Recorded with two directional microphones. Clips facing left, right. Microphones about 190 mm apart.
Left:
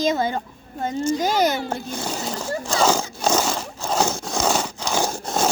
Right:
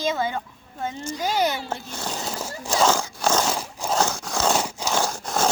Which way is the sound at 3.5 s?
10° right (ahead or behind).